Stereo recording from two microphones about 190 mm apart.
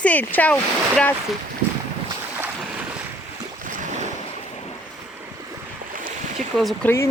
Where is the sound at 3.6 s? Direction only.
40° right (ahead or behind).